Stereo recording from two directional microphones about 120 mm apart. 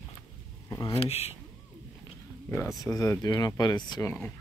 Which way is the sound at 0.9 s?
60° left (ahead or behind).